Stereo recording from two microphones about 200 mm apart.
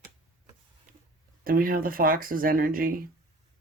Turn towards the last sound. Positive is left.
turn(degrees=-45)  # may be behind; listen again after turning